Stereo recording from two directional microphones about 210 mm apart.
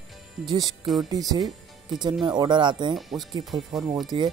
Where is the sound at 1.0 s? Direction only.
20° right (ahead or behind).